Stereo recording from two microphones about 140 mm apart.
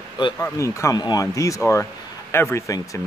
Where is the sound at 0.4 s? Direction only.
20° left (ahead or behind).